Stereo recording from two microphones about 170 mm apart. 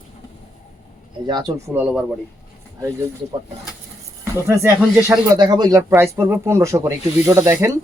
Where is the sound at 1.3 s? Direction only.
25° right (ahead or behind).